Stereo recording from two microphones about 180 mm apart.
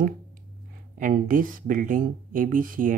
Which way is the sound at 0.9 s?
50° right (ahead or behind).